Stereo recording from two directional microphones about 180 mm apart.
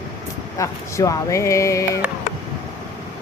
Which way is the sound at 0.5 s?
15° left (ahead or behind).